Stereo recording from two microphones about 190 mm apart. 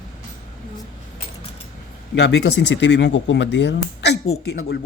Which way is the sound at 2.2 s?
65° left (ahead or behind).